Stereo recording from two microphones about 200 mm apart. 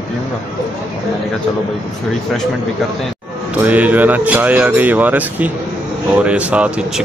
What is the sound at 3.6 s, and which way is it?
Speech, 5° right (ahead or behind).